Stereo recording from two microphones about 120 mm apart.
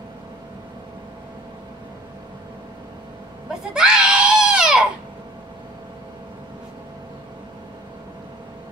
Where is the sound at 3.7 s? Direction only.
5° right (ahead or behind).